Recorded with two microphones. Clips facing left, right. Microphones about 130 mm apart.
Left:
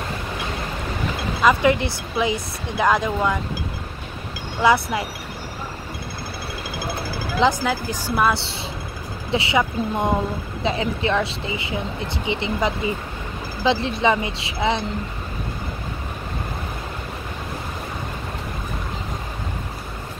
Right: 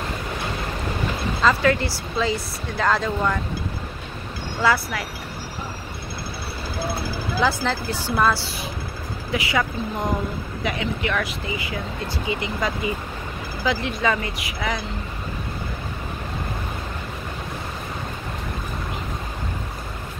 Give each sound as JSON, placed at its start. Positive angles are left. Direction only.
{"t": 1.4, "sound": "speech", "side_deg": 20}
{"t": 4.6, "sound": "speech", "side_deg": 20}
{"t": 7.6, "sound": "speech", "side_deg": 10}
{"t": 8.3, "sound": "speech", "side_deg": 25}